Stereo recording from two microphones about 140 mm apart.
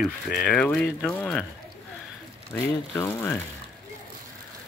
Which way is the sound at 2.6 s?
15° left (ahead or behind).